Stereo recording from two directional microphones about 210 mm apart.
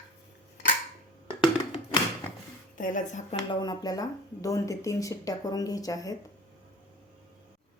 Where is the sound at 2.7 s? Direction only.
40° left (ahead or behind).